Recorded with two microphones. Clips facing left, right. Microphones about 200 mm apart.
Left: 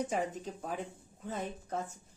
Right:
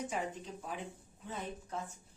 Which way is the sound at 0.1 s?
45° left (ahead or behind).